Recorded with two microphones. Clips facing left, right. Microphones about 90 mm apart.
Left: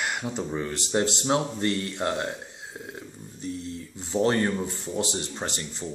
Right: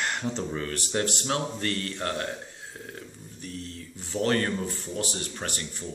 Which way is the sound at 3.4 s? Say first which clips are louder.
Left 5 dB; 20° left (ahead or behind).